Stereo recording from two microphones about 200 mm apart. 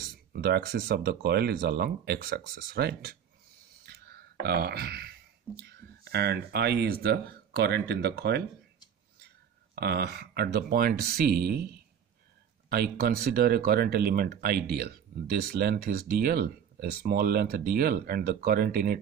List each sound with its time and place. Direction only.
0.3 s speech: 50° right (ahead or behind)
9.8 s speech: 55° right (ahead or behind)